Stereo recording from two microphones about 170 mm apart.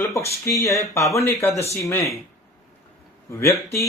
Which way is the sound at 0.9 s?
15° left (ahead or behind).